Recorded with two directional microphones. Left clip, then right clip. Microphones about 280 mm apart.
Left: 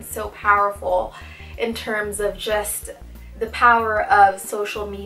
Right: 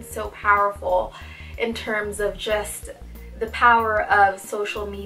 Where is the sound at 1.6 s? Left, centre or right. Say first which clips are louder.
Left 1 dB; centre.